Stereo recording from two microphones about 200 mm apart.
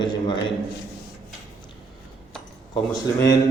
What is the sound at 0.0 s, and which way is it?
Speech, 25° left (ahead or behind).